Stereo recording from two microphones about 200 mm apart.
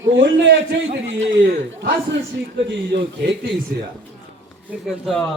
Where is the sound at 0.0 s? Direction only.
65° right (ahead or behind).